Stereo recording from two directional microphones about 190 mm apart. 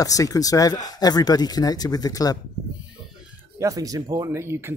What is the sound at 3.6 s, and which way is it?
Speech, 20° right (ahead or behind).